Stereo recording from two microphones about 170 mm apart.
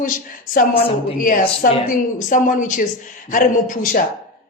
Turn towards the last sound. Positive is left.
turn(degrees=55)  # may be behind; listen again after turning